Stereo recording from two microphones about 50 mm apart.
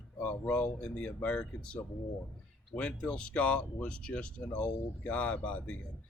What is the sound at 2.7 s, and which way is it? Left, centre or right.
Speech, left.